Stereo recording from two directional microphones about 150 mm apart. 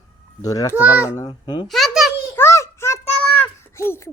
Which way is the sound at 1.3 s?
30° left (ahead or behind).